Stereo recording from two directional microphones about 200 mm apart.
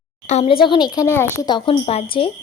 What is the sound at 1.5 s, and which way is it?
Speech, 25° left (ahead or behind).